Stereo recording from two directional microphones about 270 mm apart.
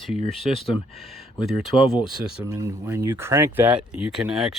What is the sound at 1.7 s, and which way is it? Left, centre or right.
Speech, centre.